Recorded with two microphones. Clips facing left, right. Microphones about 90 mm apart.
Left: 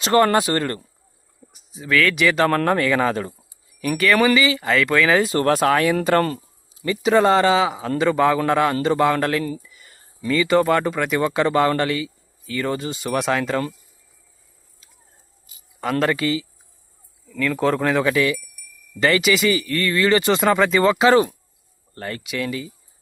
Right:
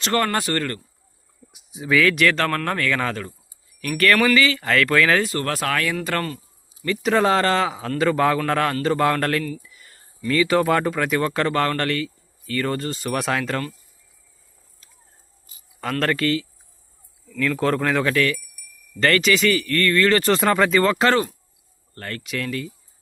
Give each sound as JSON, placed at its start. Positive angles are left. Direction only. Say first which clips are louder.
{"t": 0.0, "sound": "speech", "louder": "left 6 dB", "side_deg": 20}
{"t": 1.5, "sound": "speech", "louder": "right 1 dB", "side_deg": -15}
{"t": 2.0, "sound": "speech", "louder": "left 1 dB", "side_deg": 0}
{"t": 2.6, "sound": "speech", "louder": "left 5 dB", "side_deg": 20}
{"t": 3.8, "sound": "speech", "louder": "left 1 dB", "side_deg": 10}
{"t": 5.2, "sound": "speech", "louder": "left 7 dB", "side_deg": 25}
{"t": 6.8, "sound": "a man's voice", "louder": "left 3 dB", "side_deg": 5}
{"t": 9.6, "sound": "a sound", "louder": "left 1 dB", "side_deg": 0}
{"t": 10.2, "sound": "speech", "louder": "left 1 dB", "side_deg": 5}
{"t": 15.8, "sound": "a man's voice", "louder": "left 2 dB", "side_deg": 5}